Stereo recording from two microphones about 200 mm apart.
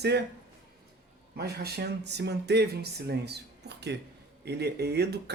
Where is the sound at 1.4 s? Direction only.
55° right (ahead or behind).